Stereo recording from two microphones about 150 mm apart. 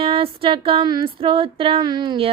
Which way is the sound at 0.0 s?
40° right (ahead or behind).